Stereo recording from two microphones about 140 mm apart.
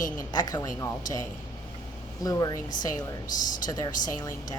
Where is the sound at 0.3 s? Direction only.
30° left (ahead or behind).